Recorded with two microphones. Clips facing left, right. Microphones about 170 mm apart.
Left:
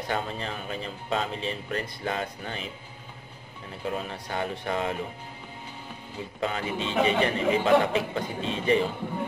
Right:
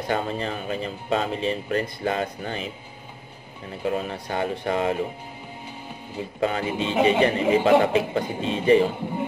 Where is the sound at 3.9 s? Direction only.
50° right (ahead or behind).